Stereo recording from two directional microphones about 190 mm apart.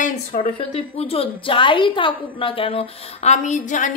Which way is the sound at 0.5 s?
30° left (ahead or behind).